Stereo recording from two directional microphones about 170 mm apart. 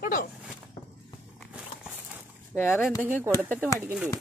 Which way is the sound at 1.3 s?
5° right (ahead or behind).